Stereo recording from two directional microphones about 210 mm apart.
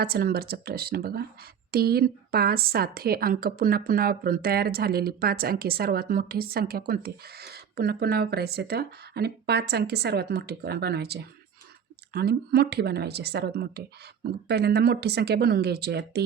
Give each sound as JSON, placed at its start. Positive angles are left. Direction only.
{"t": 0.0, "sound": "speech", "side_deg": -45}